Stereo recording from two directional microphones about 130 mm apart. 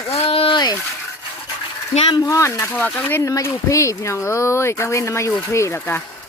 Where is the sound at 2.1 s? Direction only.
30° left (ahead or behind).